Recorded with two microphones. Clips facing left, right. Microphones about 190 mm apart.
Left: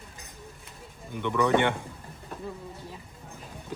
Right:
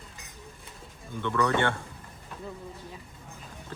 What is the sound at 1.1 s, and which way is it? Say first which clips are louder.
Speech: left 3 dB; 15° left (ahead or behind).